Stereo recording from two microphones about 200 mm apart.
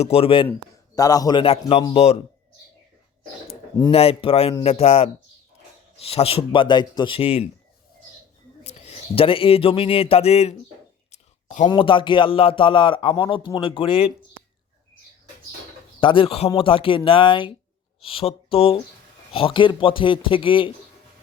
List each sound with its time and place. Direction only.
0.0 s a man's voice: 30° left (ahead or behind)
3.4 s a man's voice: 25° left (ahead or behind)
8.6 s speech: 30° left (ahead or behind)
11.1 s a sound: 35° left (ahead or behind)
11.7 s a man's voice: 25° left (ahead or behind)
16.0 s a man's voice: 25° left (ahead or behind)